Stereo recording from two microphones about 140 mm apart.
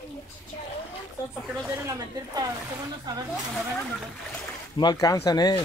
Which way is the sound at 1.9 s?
25° right (ahead or behind).